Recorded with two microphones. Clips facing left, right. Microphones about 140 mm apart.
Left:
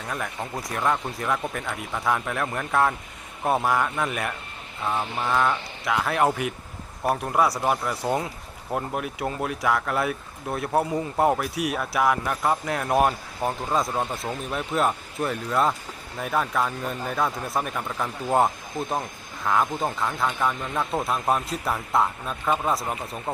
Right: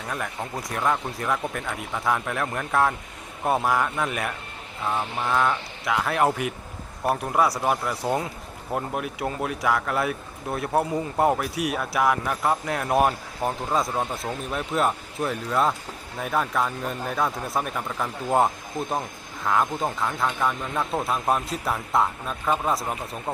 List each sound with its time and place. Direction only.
0.1 s speech: centre (ahead or behind)